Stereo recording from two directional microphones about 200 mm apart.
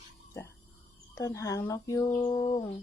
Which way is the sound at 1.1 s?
15° left (ahead or behind).